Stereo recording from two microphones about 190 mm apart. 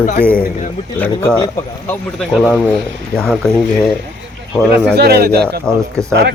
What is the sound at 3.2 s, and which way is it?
Speech, 5° left (ahead or behind).